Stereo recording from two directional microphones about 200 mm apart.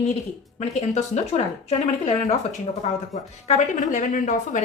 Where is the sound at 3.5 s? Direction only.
35° left (ahead or behind).